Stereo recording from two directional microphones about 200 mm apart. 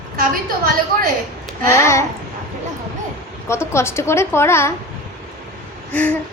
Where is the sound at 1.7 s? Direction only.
15° left (ahead or behind).